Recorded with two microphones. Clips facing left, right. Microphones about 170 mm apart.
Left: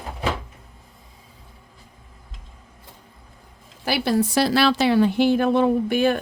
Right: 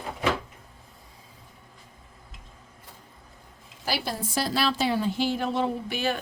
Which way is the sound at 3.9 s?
70° left (ahead or behind).